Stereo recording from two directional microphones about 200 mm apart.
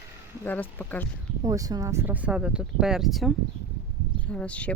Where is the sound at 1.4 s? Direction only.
20° right (ahead or behind); by 3.3 s centre (ahead or behind).